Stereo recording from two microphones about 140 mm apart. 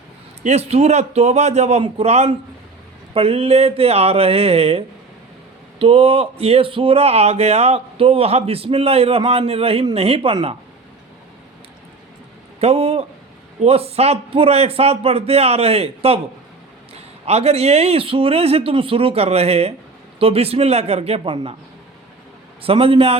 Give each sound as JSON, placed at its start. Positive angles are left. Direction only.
{"t": 0.4, "sound": "speech", "side_deg": -50}
{"t": 5.8, "sound": "speech", "side_deg": -40}
{"t": 12.5, "sound": "speech", "side_deg": -45}
{"t": 22.6, "sound": "a man's voice", "side_deg": -40}